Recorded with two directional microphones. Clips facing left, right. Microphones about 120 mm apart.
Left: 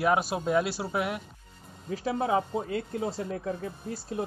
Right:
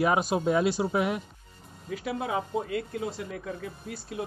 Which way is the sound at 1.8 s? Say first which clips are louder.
Left 3 dB; 30° left (ahead or behind).